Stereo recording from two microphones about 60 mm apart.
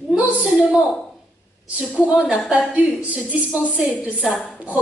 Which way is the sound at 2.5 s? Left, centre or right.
Right.